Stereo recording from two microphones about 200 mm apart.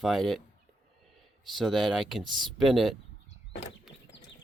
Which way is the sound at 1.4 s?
Centre (ahead or behind).